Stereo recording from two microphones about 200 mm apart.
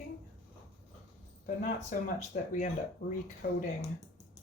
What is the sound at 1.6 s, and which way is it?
Speech, 40° left (ahead or behind).